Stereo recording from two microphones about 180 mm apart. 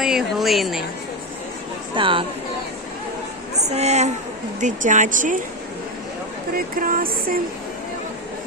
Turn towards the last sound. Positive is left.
turn(degrees=-50)  # may be behind; listen again after turning